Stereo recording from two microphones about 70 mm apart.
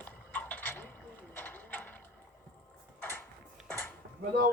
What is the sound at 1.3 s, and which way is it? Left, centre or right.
Mechanisms, left.